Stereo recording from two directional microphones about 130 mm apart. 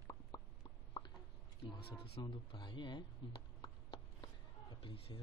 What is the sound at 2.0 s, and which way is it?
Speech, 40° left (ahead or behind).